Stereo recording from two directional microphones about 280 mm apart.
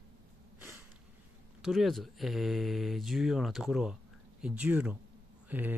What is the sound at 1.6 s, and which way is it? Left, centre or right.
Speech, centre.